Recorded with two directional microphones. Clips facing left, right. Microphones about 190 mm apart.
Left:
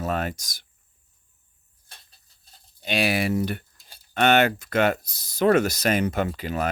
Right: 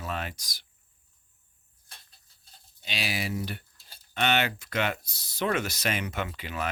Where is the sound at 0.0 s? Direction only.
45° left (ahead or behind).